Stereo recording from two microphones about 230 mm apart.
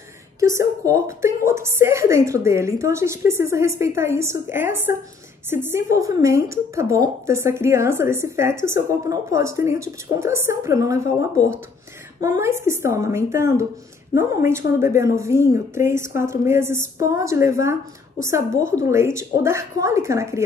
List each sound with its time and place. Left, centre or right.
0.4 s a woman's voice: centre